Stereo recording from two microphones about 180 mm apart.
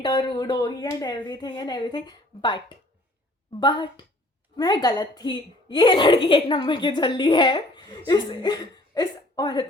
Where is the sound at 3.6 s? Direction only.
25° left (ahead or behind).